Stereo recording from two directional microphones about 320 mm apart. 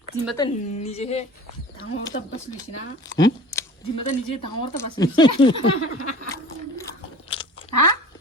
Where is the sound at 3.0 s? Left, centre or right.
Centre.